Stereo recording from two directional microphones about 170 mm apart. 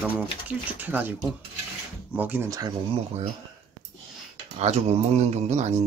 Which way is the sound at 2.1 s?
10° right (ahead or behind).